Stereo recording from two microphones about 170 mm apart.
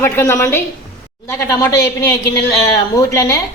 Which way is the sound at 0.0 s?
15° left (ahead or behind).